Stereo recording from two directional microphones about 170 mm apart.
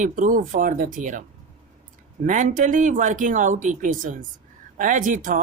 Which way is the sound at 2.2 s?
50° right (ahead or behind).